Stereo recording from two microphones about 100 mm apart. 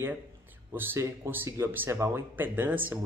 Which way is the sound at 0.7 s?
30° right (ahead or behind).